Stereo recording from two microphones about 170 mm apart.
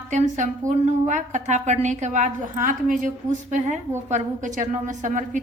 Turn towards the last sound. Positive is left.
turn(degrees=-50)  # may be behind; listen again after turning